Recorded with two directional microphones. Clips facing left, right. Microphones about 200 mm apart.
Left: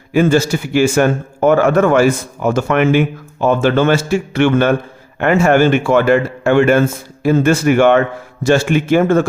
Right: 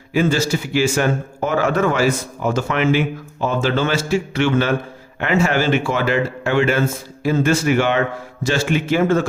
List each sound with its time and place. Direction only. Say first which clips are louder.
0.1 s a man's voice: left 5 dB; 55° left (ahead or behind)